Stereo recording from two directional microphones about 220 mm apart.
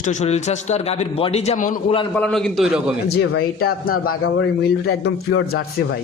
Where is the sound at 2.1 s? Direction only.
5° left (ahead or behind).